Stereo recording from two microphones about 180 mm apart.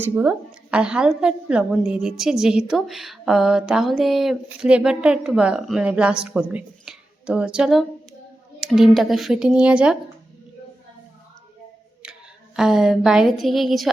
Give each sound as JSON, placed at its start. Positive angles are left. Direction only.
{"t": 0.0, "sound": "a woman's voice", "side_deg": -10}
{"t": 12.0, "sound": "a sound", "side_deg": -5}
{"t": 12.5, "sound": "a woman's voice", "side_deg": 0}